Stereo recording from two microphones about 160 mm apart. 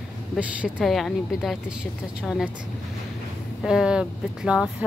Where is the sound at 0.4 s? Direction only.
5° right (ahead or behind).